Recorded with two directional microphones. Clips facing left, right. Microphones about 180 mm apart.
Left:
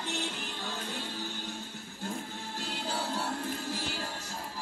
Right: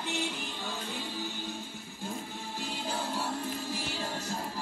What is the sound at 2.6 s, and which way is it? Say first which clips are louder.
Music: even; 15° right (ahead or behind).